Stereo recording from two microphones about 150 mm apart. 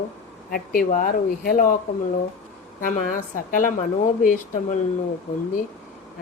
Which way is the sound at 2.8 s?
65° left (ahead or behind).